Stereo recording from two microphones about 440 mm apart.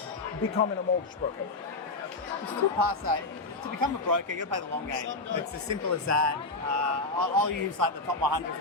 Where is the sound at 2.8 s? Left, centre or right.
Right.